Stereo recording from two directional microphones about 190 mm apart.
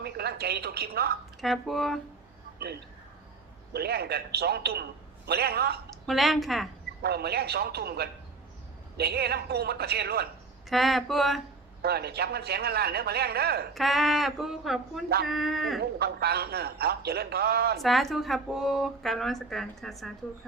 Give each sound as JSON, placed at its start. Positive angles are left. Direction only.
{"t": 0.0, "sound": "speech", "side_deg": -55}
{"t": 1.4, "sound": "a woman's voice", "side_deg": 0}
{"t": 3.7, "sound": "a man's voice", "side_deg": -55}
{"t": 6.1, "sound": "a woman's voice", "side_deg": 0}
{"t": 7.0, "sound": "a man's voice", "side_deg": -55}
{"t": 10.7, "sound": "a woman's voice", "side_deg": 0}
{"t": 11.8, "sound": "a man's voice", "side_deg": -55}
{"t": 13.7, "sound": "a woman's voice", "side_deg": 0}
{"t": 15.8, "sound": "a man's voice", "side_deg": -55}
{"t": 17.7, "sound": "a woman's voice", "side_deg": 0}